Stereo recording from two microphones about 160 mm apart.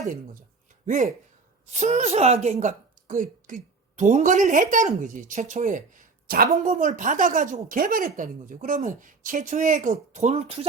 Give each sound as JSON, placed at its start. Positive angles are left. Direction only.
{"t": 0.9, "sound": "a woman's voice", "side_deg": -50}